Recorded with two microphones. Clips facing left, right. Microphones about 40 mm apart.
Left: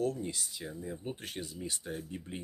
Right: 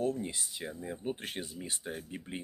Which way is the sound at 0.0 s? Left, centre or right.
Right.